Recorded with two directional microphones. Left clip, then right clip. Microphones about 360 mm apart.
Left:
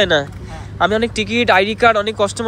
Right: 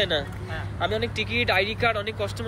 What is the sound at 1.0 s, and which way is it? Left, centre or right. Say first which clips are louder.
Speech: left 9 dB; centre.